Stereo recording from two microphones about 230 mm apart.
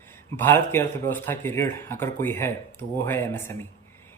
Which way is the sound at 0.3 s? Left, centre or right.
Centre.